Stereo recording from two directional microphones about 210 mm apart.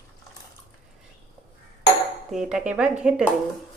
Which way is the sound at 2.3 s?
Centre (ahead or behind).